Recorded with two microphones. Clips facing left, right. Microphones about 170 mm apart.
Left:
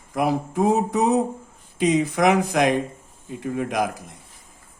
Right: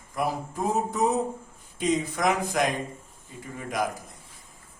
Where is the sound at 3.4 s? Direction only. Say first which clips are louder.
Left 8 dB; 90° left.